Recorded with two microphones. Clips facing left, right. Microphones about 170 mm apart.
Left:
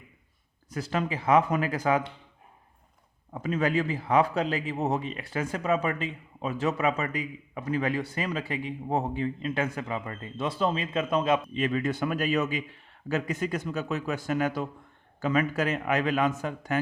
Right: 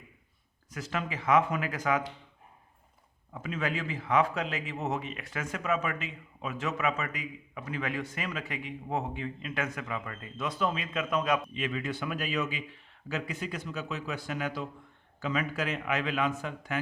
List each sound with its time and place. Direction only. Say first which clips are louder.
0.7 s speech: left 5 dB; 35° left (ahead or behind)
3.3 s speech: left 7 dB; 40° left (ahead or behind)
11.5 s a man's voice: left 6 dB; 40° left (ahead or behind)